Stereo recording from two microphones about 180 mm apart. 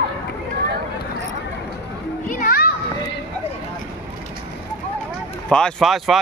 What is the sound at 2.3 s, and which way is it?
Children playing, 50° left (ahead or behind).